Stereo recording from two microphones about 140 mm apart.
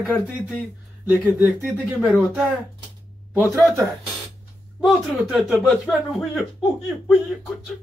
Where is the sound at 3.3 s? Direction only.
20° right (ahead or behind).